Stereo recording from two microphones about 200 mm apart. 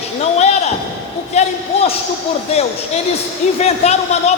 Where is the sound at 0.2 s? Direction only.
35° left (ahead or behind).